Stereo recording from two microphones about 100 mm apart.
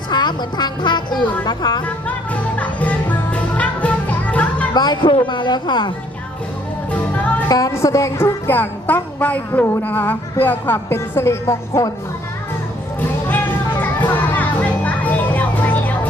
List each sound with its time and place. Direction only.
0.1 s a woman's voice: 45° left (ahead or behind)
2.0 s music: 15° left (ahead or behind)
4.7 s speech: 45° left (ahead or behind)
6.9 s music: 15° left (ahead or behind)
7.4 s speech: 35° left (ahead or behind)
8.4 s a woman's voice: 20° left (ahead or behind)
13.2 s music: 20° left (ahead or behind)